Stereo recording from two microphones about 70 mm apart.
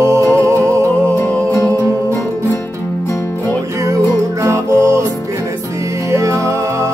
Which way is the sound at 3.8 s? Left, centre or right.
Right.